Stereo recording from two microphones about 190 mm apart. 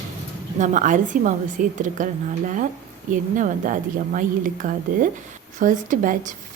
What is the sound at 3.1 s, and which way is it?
A woman's voice, 45° right (ahead or behind).